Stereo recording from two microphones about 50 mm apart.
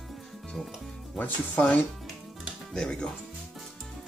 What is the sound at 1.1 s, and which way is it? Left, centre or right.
Speech, left.